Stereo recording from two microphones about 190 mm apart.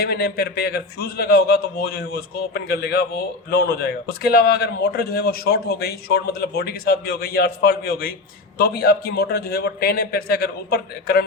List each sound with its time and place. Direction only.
0.0 s a man's voice: 55° left (ahead or behind)